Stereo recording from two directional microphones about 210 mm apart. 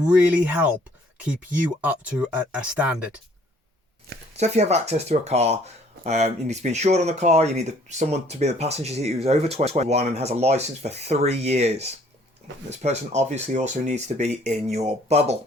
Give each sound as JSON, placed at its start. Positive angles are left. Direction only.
{"t": 0.0, "sound": "speech", "side_deg": -5}
{"t": 1.8, "sound": "speech", "side_deg": -5}
{"t": 4.4, "sound": "speech", "side_deg": -30}